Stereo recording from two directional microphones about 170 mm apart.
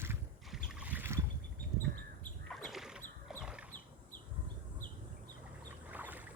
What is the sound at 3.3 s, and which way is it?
Chicken, 5° right (ahead or behind).